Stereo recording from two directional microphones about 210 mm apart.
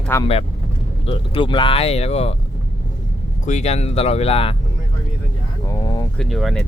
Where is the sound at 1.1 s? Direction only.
25° left (ahead or behind).